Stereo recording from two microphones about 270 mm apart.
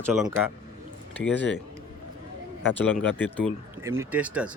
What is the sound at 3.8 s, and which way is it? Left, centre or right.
Speech, centre.